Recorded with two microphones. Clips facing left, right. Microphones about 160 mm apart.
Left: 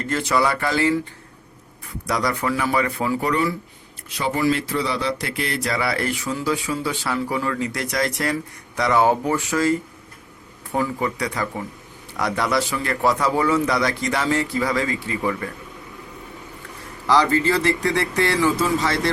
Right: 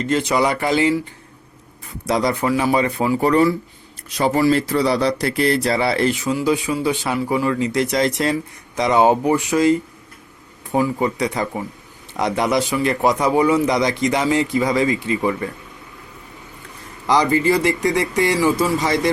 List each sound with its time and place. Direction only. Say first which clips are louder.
0.0 s a man's voice: right 3 dB; 20° right (ahead or behind)
2.0 s a man's voice: right 4 dB; 25° right (ahead or behind)
17.1 s speech: right 2 dB; 15° right (ahead or behind)